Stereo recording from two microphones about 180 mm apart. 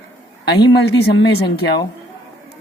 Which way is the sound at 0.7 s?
75° left (ahead or behind).